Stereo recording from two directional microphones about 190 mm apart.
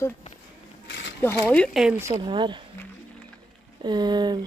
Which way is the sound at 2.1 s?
25° right (ahead or behind).